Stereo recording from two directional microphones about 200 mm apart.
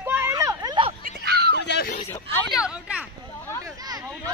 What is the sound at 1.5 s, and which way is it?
Dog, 60° left (ahead or behind).